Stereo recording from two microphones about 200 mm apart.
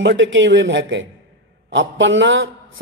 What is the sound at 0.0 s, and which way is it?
A man's voice, 65° right (ahead or behind).